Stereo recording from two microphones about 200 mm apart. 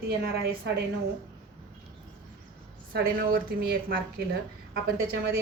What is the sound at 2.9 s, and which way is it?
A woman's voice, 50° right (ahead or behind).